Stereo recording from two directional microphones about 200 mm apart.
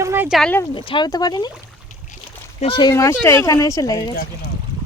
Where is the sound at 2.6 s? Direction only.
25° left (ahead or behind).